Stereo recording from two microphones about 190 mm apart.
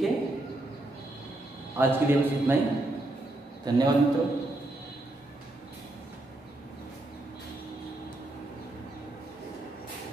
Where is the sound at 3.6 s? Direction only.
20° right (ahead or behind).